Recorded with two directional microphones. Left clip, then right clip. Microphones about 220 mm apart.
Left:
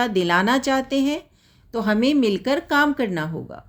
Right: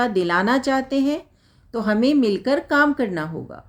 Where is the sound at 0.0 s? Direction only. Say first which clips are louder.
Even; 30° left (ahead or behind).